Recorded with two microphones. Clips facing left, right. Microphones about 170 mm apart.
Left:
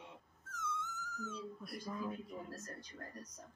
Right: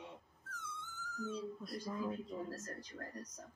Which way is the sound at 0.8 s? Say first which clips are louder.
Right 1 dB; 30° right (ahead or behind).